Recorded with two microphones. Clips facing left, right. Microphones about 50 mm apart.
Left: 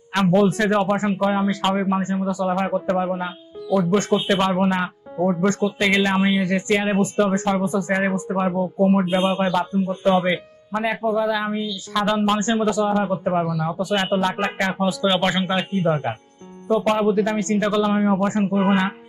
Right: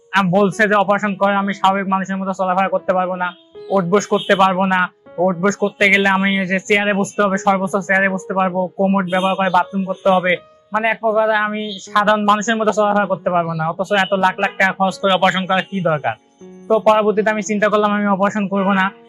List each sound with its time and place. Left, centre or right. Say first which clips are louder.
0.4 s speech: right 5 dB; right
15.0 s speech: right 4 dB; right
15.9 s speech: right 4 dB; right